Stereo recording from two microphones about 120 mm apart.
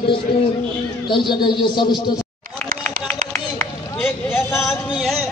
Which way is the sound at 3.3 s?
20° left (ahead or behind).